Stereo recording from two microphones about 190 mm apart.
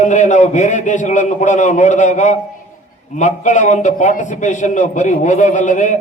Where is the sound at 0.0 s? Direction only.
40° left (ahead or behind).